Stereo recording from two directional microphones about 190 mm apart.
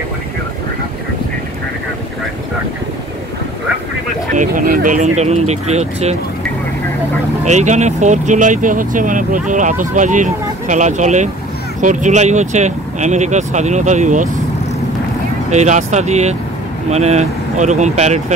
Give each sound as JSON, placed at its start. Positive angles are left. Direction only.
{"t": 4.4, "sound": "speech", "side_deg": -45}
{"t": 7.4, "sound": "speech", "side_deg": -40}
{"t": 15.5, "sound": "speech", "side_deg": -40}